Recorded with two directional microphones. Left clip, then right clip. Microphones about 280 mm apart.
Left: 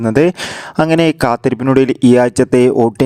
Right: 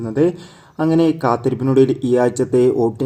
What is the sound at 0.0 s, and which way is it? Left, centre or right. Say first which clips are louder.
Speech: left 6 dB; left.